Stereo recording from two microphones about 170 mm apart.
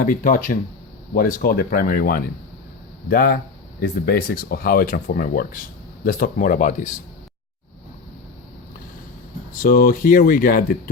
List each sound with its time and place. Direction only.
0.0 s speech: 50° left (ahead or behind)
9.6 s speech: 55° left (ahead or behind)